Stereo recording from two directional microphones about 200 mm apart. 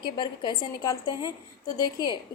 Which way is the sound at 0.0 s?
25° left (ahead or behind).